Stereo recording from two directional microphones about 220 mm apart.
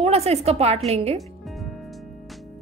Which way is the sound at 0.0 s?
30° right (ahead or behind).